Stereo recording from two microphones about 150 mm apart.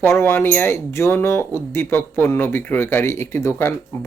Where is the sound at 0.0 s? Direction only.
15° left (ahead or behind).